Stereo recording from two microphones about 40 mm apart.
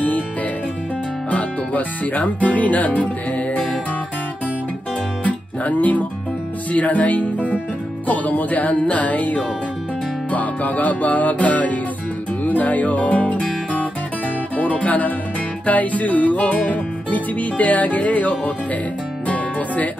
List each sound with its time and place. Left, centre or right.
1.3 s speech: left
5.2 s music: left
14.6 s music: left